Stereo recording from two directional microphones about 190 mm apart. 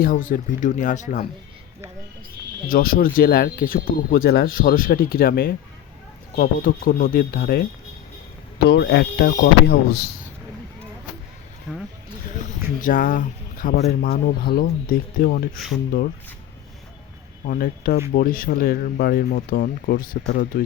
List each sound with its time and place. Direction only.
0.0 s speech: 45° left (ahead or behind)
2.6 s speech: 50° left (ahead or behind)
12.8 s speech: 45° left (ahead or behind)
17.4 s speech: 50° left (ahead or behind)